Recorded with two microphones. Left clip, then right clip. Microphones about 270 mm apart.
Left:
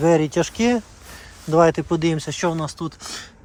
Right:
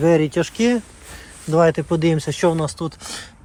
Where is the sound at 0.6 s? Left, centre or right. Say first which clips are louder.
Right 1 dB; centre.